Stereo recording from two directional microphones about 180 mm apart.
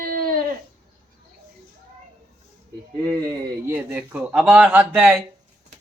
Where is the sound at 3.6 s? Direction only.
10° right (ahead or behind).